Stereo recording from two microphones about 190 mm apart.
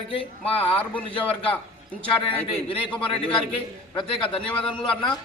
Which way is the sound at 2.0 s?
30° left (ahead or behind).